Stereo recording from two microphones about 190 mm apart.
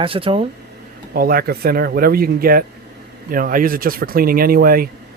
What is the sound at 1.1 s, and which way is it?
Speech, 50° right (ahead or behind).